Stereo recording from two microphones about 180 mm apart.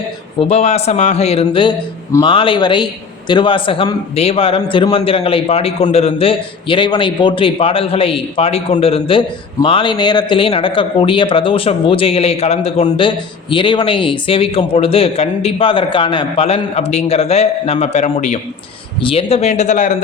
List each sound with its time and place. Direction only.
0.3 s a man's voice: 35° left (ahead or behind)